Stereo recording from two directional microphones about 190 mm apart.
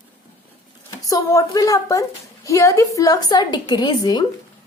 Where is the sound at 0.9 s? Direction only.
15° left (ahead or behind).